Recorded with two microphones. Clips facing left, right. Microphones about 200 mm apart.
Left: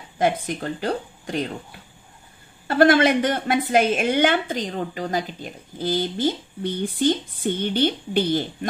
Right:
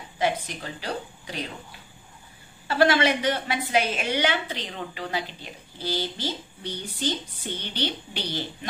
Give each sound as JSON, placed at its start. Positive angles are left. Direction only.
{"t": 0.2, "sound": "a woman's voice", "side_deg": 50}
{"t": 2.7, "sound": "a woman's voice", "side_deg": 50}